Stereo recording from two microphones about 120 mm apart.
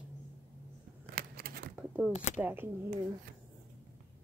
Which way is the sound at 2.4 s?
20° right (ahead or behind).